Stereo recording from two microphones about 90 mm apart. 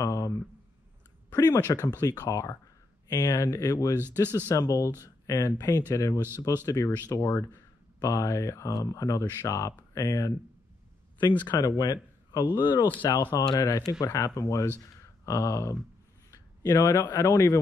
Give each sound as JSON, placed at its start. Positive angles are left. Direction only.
{"t": 0.0, "sound": "a sound", "side_deg": 35}
{"t": 2.0, "sound": "speech", "side_deg": 40}
{"t": 3.9, "sound": "speech", "side_deg": -25}
{"t": 4.5, "sound": "speech", "side_deg": 40}
{"t": 11.4, "sound": "speech", "side_deg": 50}
{"t": 13.0, "sound": "speech", "side_deg": 45}